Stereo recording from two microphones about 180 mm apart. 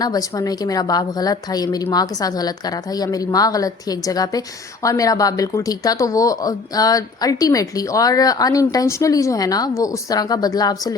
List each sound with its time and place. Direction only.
0.0 s a woman's voice: 20° left (ahead or behind)